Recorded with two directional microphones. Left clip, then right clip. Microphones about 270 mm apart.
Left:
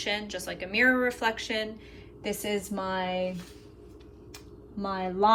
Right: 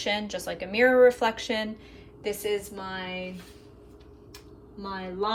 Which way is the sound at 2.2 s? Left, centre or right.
Centre.